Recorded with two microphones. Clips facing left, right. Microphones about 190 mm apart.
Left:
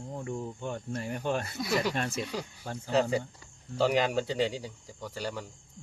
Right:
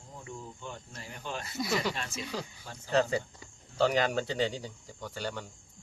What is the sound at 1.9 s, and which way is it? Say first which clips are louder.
Speech: left 5 dB; 55° left (ahead or behind).